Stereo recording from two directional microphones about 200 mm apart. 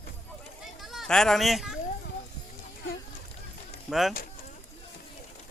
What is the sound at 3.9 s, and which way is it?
Speech, centre (ahead or behind).